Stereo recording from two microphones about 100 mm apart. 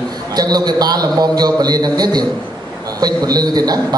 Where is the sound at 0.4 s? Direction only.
40° right (ahead or behind).